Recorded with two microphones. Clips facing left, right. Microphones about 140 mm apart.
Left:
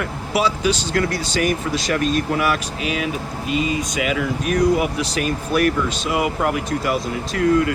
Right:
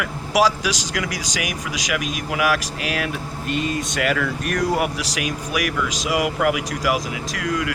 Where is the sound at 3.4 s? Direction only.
5° left (ahead or behind).